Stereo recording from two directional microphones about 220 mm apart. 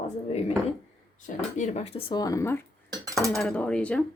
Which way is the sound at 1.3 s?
30° left (ahead or behind).